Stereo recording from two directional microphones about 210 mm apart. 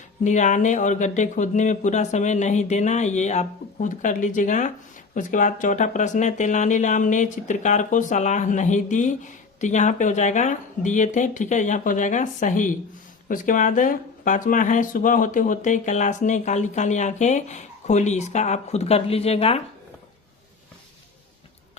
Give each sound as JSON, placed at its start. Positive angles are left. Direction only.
{"t": 0.3, "sound": "speech", "side_deg": 35}